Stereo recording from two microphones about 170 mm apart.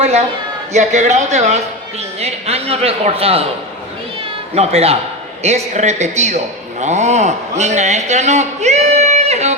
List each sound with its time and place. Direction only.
0.0 s a man's voice: 40° right (ahead or behind)
4.5 s a man's voice: 40° right (ahead or behind)